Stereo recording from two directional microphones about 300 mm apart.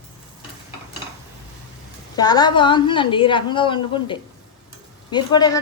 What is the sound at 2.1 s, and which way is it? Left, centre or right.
Speech, centre.